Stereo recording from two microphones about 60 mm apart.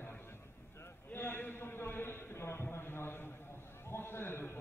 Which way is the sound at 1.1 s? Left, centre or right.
Left.